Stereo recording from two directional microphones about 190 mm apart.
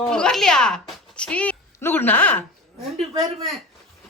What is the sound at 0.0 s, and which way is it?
A woman's voice, 5° left (ahead or behind).